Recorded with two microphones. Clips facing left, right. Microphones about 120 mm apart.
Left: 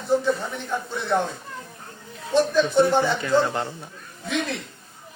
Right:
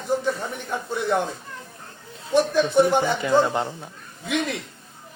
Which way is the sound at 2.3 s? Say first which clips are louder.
Even; 15° right (ahead or behind).